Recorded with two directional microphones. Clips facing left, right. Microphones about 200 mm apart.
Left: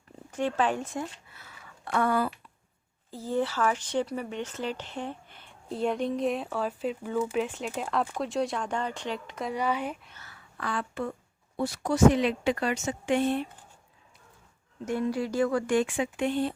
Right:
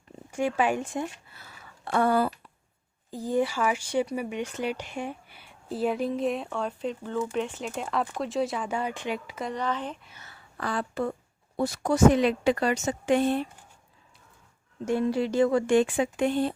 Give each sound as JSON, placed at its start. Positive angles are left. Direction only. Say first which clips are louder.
{"t": 0.3, "sound": "speech", "louder": "right 2 dB", "side_deg": -10}
{"t": 1.4, "sound": "a sound", "louder": "right 1 dB", "side_deg": -30}
{"t": 3.1, "sound": "speech", "louder": "right 3 dB", "side_deg": -15}
{"t": 9.6, "sound": "speech", "louder": "left 3 dB", "side_deg": 10}
{"t": 10.2, "sound": "a sound", "louder": "right 1 dB", "side_deg": -25}
{"t": 10.6, "sound": "speech", "louder": "right 3 dB", "side_deg": -35}
{"t": 14.8, "sound": "speech", "louder": "right 3 dB", "side_deg": -25}